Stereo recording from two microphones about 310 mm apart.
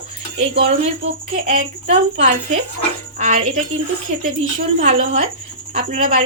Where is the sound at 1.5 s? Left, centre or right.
Centre.